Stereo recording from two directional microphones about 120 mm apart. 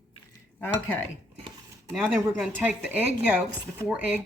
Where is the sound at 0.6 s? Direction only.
15° left (ahead or behind).